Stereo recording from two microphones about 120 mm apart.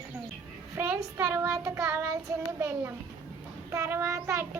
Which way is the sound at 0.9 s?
25° right (ahead or behind).